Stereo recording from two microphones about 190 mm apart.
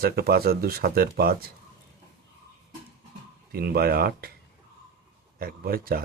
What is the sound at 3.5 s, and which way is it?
Speech, 55° right (ahead or behind).